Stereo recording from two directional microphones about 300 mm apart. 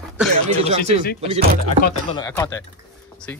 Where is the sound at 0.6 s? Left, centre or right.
Right.